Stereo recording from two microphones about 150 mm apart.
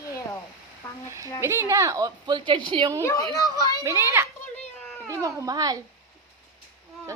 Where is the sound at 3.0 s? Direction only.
20° left (ahead or behind).